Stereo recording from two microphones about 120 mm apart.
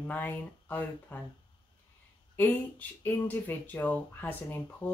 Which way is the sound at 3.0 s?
15° left (ahead or behind).